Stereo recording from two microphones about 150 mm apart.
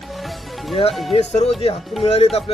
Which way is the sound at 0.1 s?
Centre (ahead or behind).